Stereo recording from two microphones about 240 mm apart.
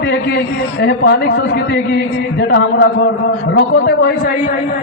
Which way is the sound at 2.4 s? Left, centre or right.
Left.